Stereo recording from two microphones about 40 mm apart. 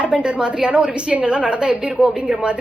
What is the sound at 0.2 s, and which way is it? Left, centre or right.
A woman's voice, right.